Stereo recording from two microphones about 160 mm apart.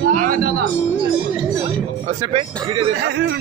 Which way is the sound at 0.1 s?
55° right (ahead or behind).